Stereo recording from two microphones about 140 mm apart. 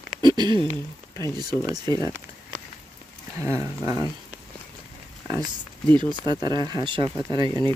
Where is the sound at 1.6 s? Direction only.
25° right (ahead or behind).